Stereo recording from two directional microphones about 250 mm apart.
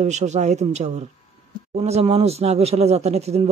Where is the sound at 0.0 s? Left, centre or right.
Right.